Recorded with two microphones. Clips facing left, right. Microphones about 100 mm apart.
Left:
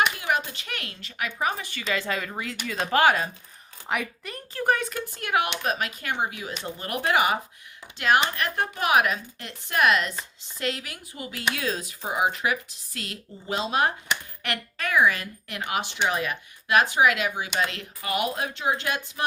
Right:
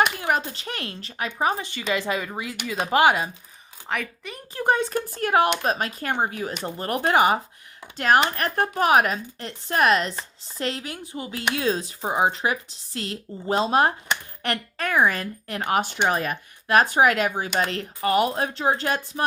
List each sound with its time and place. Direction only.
0.2 s speech: 35° right (ahead or behind); by 3.2 s 20° right (ahead or behind)
3.8 s speech: 5° left (ahead or behind)
4.5 s speech: 25° right (ahead or behind)